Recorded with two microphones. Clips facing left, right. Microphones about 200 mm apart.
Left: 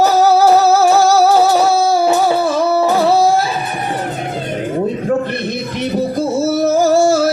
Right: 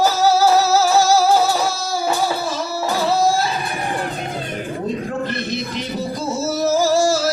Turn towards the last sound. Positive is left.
turn(degrees=60)  # may be behind; listen again after turning